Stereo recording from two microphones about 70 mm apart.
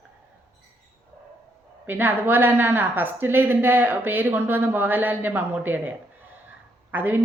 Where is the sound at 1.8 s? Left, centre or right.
Right.